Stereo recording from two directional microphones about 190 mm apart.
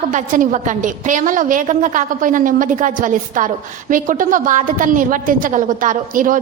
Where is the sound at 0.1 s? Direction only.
40° right (ahead or behind).